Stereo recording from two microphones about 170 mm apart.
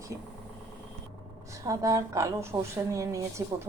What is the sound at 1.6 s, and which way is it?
A woman's voice, 20° right (ahead or behind).